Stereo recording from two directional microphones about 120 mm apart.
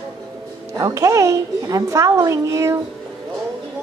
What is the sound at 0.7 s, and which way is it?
A woman's voice, 30° right (ahead or behind).